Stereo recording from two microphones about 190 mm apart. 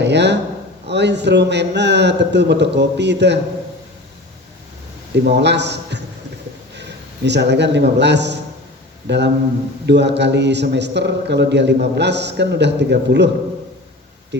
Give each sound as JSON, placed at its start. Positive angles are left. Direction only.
{"t": 0.0, "sound": "a sound", "side_deg": -65}
{"t": 0.9, "sound": "a man's voice", "side_deg": -65}
{"t": 5.2, "sound": "a man's voice", "side_deg": -65}
{"t": 7.3, "sound": "a man's voice", "side_deg": -65}